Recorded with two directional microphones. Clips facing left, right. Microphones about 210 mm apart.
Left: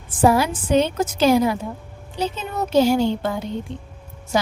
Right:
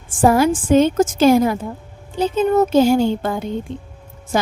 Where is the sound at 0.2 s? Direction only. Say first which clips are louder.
Right 3 dB; 50° right (ahead or behind).